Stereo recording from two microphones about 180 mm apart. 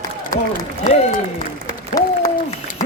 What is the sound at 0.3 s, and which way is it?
Speech, 20° left (ahead or behind).